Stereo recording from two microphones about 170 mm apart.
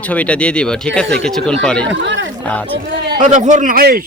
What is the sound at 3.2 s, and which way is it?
Speech, 45° right (ahead or behind).